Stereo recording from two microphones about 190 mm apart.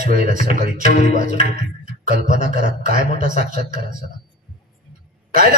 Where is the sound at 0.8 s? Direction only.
35° left (ahead or behind).